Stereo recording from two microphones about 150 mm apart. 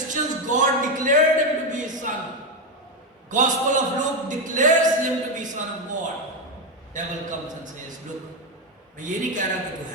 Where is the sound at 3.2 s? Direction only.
55° right (ahead or behind).